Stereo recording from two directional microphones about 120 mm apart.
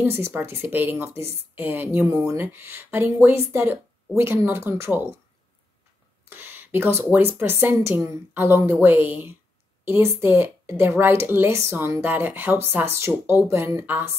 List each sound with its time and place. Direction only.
0.0 s a woman's voice: 15° right (ahead or behind)
6.2 s a woman's voice: 15° right (ahead or behind)